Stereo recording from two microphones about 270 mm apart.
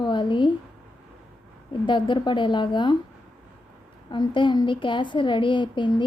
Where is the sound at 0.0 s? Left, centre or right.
Centre.